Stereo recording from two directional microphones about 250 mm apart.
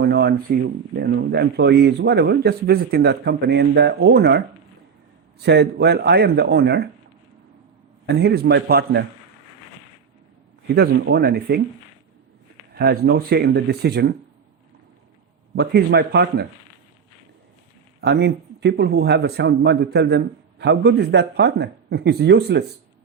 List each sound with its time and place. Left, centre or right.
0.0 s speech: right
8.0 s speech: right
10.7 s speech: right
12.8 s speech: right
15.5 s speech: right
18.0 s speech: right